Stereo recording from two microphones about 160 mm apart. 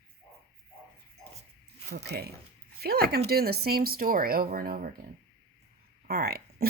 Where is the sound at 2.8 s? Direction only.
75° right (ahead or behind).